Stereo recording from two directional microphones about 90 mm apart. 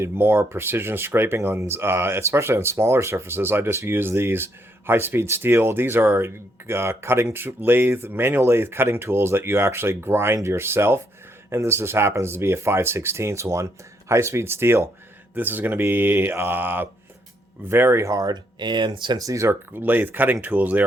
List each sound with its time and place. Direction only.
0.0 s speech: 25° right (ahead or behind); by 19.2 s 60° right (ahead or behind)
19.2 s speech: 35° right (ahead or behind); by 20.8 s 20° right (ahead or behind)